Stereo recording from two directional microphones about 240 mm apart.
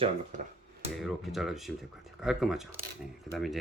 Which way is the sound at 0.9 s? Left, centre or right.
Centre.